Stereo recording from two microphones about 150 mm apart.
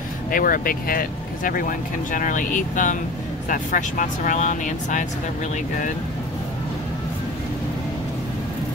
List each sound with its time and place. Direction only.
0.3 s speech: 70° left (ahead or behind)